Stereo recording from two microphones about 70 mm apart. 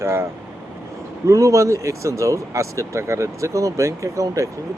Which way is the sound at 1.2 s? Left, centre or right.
Right.